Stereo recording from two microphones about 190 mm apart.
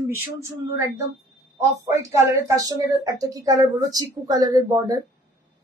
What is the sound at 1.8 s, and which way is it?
A woman's voice, 15° right (ahead or behind).